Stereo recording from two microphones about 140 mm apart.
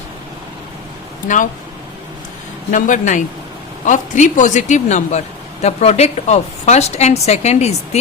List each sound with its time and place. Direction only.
1.3 s speech: 80° left
2.7 s a woman's voice: 65° left (ahead or behind)